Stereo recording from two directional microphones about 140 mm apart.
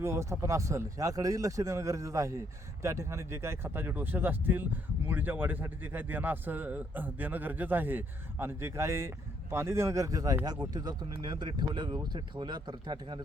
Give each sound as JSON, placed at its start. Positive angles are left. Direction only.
{"t": 0.0, "sound": "speech", "side_deg": -20}